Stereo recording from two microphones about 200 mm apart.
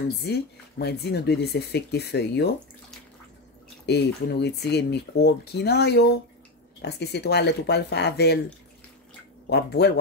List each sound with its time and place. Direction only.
0.3 s speech: 55° left (ahead or behind)
3.8 s speech: 55° left (ahead or behind)
9.5 s speech: 55° left (ahead or behind)